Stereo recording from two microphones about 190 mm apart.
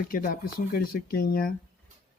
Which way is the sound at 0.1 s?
50° left (ahead or behind).